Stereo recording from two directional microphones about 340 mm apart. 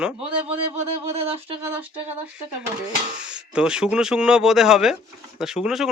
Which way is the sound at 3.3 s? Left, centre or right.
Centre.